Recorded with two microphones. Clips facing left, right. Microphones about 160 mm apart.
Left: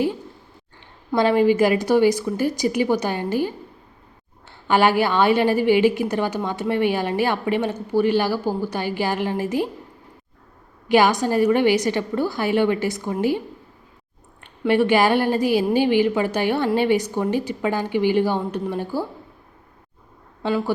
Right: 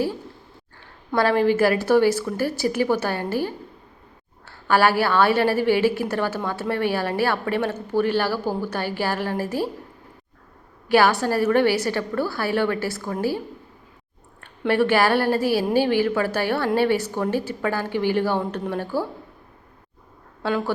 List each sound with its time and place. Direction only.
1.1 s a woman's voice: 15° left (ahead or behind)
10.8 s a woman's voice: 15° left (ahead or behind)
14.7 s a woman's voice: 15° left (ahead or behind)